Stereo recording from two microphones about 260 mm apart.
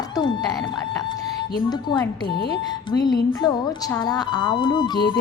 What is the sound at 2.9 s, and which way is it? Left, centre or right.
A woman's voice, centre.